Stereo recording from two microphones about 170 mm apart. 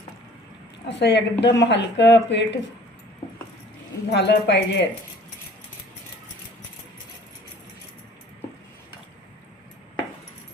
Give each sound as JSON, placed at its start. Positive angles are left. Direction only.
{"t": 0.9, "sound": "speech", "side_deg": 90}
{"t": 4.1, "sound": "speech", "side_deg": 90}